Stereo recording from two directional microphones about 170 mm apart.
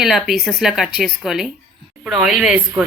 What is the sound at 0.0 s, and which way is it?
A woman's voice, centre (ahead or behind).